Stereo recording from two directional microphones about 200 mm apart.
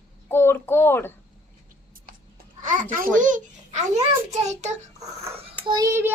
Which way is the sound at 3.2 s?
40° right (ahead or behind).